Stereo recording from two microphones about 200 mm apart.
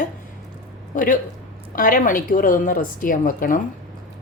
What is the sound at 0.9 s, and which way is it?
A woman's voice, 40° left (ahead or behind).